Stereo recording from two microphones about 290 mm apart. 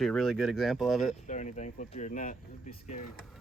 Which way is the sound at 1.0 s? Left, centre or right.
Left.